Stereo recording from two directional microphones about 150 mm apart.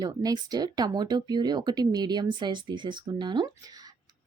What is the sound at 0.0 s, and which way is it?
A woman's voice, 25° right (ahead or behind).